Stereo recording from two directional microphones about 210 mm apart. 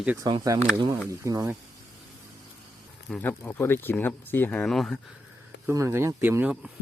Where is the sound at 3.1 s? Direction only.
5° left (ahead or behind).